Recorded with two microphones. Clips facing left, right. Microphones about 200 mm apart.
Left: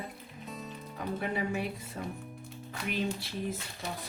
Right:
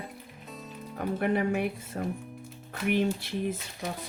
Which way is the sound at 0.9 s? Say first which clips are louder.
Right 6 dB; 55° right (ahead or behind).